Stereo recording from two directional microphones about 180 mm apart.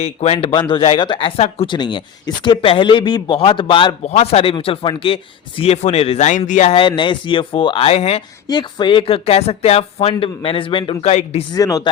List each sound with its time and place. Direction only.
0.0 s speech: 35° left (ahead or behind)
11.5 s speech: 20° left (ahead or behind)